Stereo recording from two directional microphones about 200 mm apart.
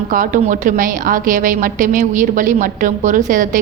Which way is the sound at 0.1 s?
40° right (ahead or behind).